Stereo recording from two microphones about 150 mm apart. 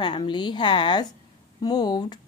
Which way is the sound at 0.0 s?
30° left (ahead or behind).